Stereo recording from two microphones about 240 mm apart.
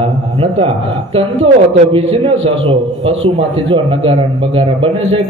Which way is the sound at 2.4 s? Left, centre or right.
Right.